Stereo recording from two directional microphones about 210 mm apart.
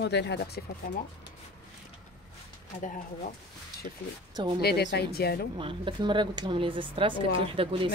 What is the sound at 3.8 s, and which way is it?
Speech, 40° left (ahead or behind).